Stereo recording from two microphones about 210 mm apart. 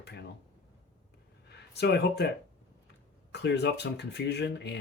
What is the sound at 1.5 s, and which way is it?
Speech, 50° left (ahead or behind).